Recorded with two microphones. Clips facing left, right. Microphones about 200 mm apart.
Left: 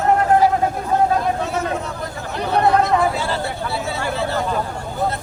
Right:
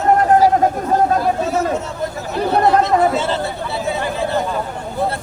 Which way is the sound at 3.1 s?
20° right (ahead or behind).